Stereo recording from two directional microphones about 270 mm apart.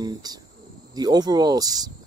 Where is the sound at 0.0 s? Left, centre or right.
Centre.